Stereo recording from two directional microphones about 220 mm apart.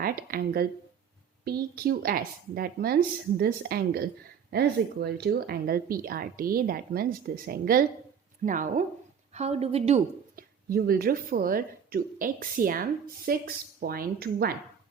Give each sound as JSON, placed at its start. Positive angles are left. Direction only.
{"t": 0.0, "sound": "a woman's voice", "side_deg": -40}
{"t": 10.7, "sound": "speech", "side_deg": -40}